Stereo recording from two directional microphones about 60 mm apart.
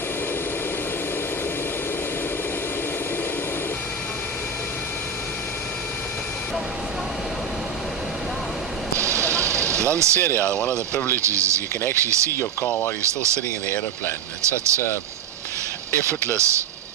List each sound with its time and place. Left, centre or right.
9.0 s vehicle: right
10.2 s speech: left
10.6 s speech: left
11.2 s speech: right
12.6 s speech: left
13.0 s speech: right
14.4 s speech: right
16.4 s speech: right